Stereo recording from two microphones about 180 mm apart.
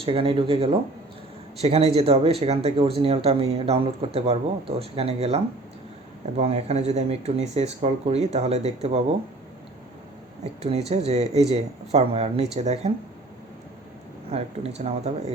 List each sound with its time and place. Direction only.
0.0 s speech: 30° right (ahead or behind)
10.6 s speech: 35° right (ahead or behind)
14.3 s speech: 35° right (ahead or behind)